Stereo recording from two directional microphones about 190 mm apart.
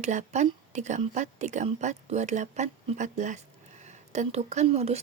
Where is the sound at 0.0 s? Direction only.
40° right (ahead or behind).